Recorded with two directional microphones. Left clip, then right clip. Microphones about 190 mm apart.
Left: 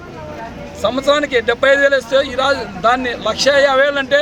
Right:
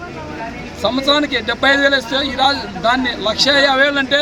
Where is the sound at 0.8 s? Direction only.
30° left (ahead or behind).